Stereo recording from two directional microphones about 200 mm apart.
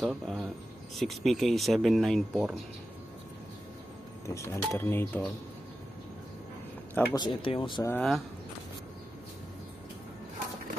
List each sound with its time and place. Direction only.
0.0 s speech: centre (ahead or behind)
4.3 s speech: 15° left (ahead or behind)
7.2 s speech: 25° left (ahead or behind)
7.9 s speech: 5° left (ahead or behind)